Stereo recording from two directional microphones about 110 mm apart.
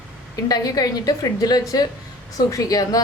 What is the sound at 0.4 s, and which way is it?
A woman's voice, 35° left (ahead or behind).